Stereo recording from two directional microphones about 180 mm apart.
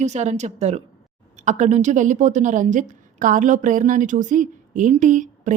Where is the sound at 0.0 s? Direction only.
40° right (ahead or behind).